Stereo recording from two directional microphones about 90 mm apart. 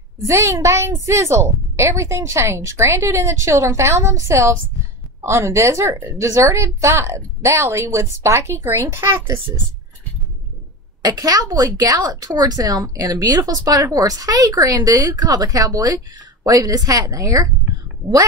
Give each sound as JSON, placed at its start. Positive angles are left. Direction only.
{"t": 0.3, "sound": "a woman's voice", "side_deg": -35}
{"t": 11.0, "sound": "a woman's voice", "side_deg": -45}